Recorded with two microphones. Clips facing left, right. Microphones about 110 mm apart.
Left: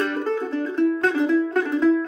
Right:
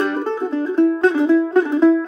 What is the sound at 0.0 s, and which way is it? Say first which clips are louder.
Music: right 3 dB; 30° right (ahead or behind).